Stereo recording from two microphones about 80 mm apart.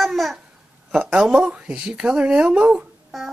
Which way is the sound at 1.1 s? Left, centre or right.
Centre.